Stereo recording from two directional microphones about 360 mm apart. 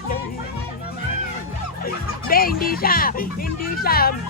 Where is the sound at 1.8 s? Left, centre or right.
Left.